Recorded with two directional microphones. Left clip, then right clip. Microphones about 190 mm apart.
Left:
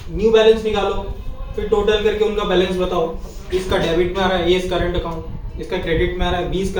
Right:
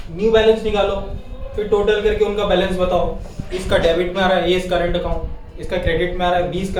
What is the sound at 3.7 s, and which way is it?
Speech, 25° right (ahead or behind).